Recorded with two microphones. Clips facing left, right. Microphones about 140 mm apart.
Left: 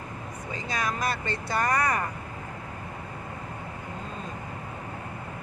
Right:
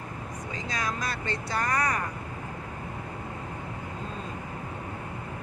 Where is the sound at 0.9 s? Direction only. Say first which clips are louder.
Left 4 dB; 55° left (ahead or behind).